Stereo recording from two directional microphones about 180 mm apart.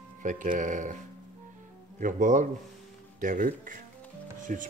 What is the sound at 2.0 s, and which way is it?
Speech, 45° right (ahead or behind).